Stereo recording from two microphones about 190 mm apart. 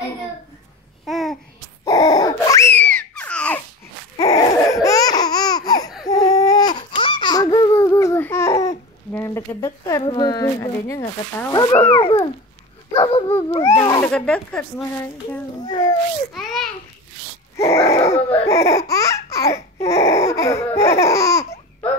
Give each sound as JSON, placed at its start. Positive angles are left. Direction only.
{"t": 1.0, "sound": "babbling", "side_deg": 0}
{"t": 1.9, "sound": "a sound", "side_deg": 20}
{"t": 4.2, "sound": "a sound", "side_deg": 25}
{"t": 4.8, "sound": "laughter", "side_deg": 20}
{"t": 6.0, "sound": "babbling", "side_deg": 20}
{"t": 11.9, "sound": "speech", "side_deg": 25}
{"t": 14.0, "sound": "speech", "side_deg": 5}
{"t": 15.6, "sound": "a child's voice", "side_deg": 20}
{"t": 17.6, "sound": "laughter", "side_deg": 15}